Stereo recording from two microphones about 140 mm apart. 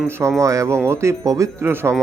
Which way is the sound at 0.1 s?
20° right (ahead or behind).